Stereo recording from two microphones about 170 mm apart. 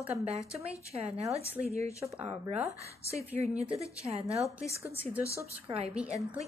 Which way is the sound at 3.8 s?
35° right (ahead or behind).